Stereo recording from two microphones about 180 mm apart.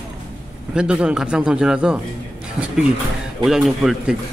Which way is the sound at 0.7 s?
5° right (ahead or behind).